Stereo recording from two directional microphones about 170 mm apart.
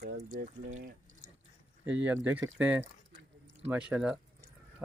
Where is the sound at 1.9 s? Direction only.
10° right (ahead or behind).